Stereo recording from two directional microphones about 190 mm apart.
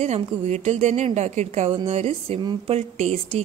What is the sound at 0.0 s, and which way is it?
A woman's voice, 35° right (ahead or behind).